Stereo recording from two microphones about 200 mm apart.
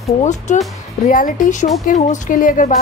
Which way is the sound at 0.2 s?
35° left (ahead or behind).